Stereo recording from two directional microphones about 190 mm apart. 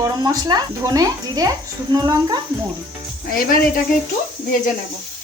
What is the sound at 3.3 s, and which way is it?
Speech, 50° left (ahead or behind).